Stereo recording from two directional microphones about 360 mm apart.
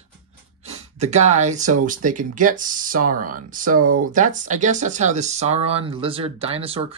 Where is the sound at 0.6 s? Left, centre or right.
Centre.